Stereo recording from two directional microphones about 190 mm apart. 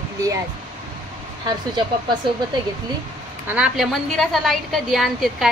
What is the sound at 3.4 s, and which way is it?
A woman's voice, 5° right (ahead or behind).